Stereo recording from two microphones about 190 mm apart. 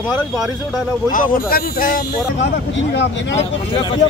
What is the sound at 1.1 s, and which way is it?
Speech, 50° left (ahead or behind).